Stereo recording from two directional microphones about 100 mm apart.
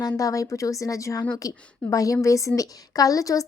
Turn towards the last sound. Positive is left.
turn(degrees=35)  # may be behind; listen again after turning